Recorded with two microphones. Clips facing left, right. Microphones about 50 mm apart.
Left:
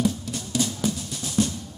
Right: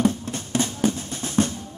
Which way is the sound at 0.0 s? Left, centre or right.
Right.